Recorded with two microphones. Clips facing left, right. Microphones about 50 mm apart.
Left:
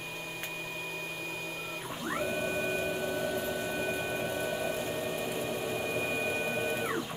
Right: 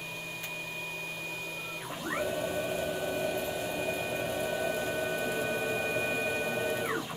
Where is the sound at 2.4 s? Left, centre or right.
Left.